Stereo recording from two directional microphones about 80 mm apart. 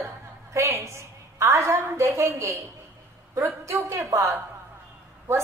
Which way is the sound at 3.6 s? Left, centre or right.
Right.